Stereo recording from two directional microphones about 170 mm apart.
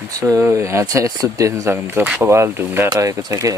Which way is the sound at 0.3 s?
15° right (ahead or behind).